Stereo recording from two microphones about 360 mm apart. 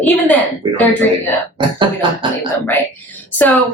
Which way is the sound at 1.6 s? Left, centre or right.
Centre.